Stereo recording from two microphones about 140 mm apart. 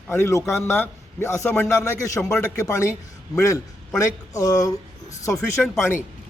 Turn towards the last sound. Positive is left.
turn(degrees=5)  # may be behind; listen again after turning